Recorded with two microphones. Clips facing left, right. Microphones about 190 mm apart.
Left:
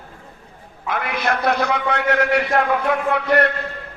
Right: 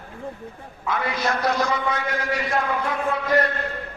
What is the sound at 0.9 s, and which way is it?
A man's voice, 60° left (ahead or behind).